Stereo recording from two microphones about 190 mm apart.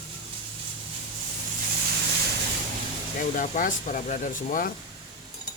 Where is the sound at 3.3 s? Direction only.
45° left (ahead or behind).